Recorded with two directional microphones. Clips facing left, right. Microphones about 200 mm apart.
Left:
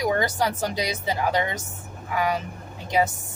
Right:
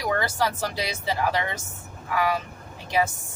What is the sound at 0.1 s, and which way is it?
Speech, 20° left (ahead or behind).